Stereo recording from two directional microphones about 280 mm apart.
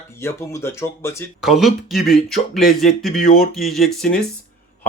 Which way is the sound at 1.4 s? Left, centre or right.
Centre.